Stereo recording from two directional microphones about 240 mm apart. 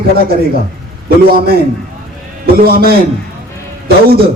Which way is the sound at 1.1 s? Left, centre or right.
Right.